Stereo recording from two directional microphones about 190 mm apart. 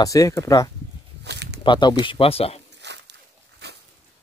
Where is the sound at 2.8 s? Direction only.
65° right (ahead or behind).